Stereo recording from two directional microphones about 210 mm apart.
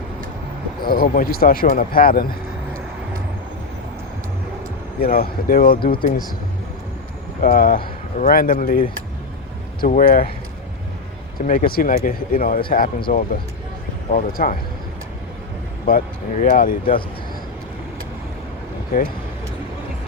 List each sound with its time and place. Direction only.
0.8 s speech: 45° left (ahead or behind)
4.9 s speech: 45° left (ahead or behind)
7.4 s speech: 40° left (ahead or behind)
11.3 s speech: 40° left (ahead or behind)
15.9 s speech: 40° left (ahead or behind)